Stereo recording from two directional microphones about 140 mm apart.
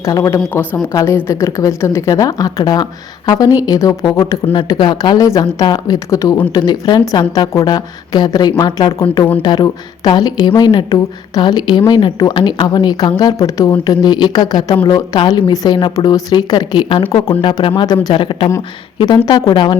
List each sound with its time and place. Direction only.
0.0 s speech: 25° left (ahead or behind); by 17.8 s 40° left (ahead or behind)
17.8 s speech: 30° left (ahead or behind)